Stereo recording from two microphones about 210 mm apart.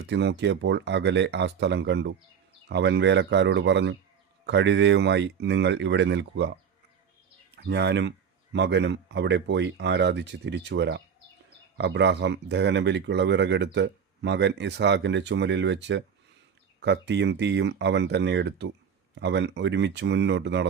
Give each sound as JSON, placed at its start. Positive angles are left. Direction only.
{"t": 0.1, "sound": "speech", "side_deg": -55}
{"t": 7.5, "sound": "speech", "side_deg": -55}